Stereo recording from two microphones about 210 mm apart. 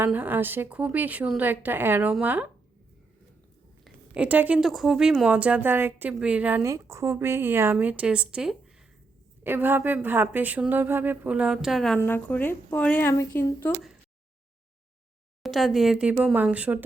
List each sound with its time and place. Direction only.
0.0 s speech: 10° right (ahead or behind)
3.8 s speech: 5° right (ahead or behind)
15.4 s speech: centre (ahead or behind)